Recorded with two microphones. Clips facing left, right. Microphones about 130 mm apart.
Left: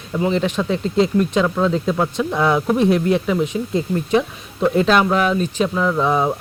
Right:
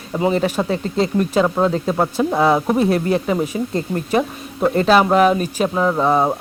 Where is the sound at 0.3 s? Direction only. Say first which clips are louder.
Right 1 dB; 5° right (ahead or behind).